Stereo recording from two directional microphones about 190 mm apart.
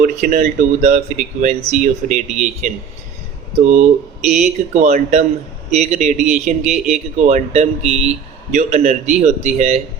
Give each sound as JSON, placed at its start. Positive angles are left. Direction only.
{"t": 0.0, "sound": "speech", "side_deg": -45}